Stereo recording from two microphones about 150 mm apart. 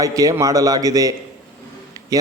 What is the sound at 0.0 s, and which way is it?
A man's voice, 25° right (ahead or behind).